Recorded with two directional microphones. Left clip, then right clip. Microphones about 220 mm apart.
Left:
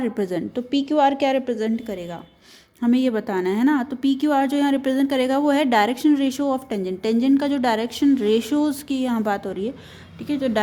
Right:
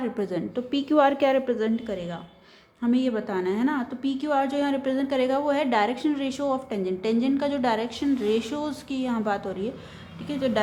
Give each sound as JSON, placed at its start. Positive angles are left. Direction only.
{"t": 0.0, "sound": "speech", "side_deg": 35}
{"t": 0.7, "sound": "a woman's voice", "side_deg": 20}